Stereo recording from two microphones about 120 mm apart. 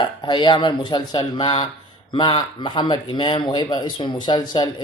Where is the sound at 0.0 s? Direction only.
40° left (ahead or behind).